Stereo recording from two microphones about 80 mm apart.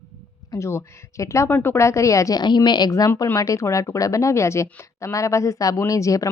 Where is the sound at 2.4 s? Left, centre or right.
Left.